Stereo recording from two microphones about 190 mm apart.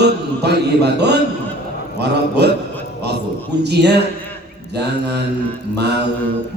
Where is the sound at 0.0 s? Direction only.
60° right (ahead or behind).